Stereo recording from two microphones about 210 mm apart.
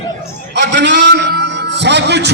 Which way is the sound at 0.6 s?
55° right (ahead or behind).